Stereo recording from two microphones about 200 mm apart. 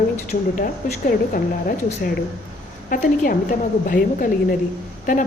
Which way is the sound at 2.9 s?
45° left (ahead or behind).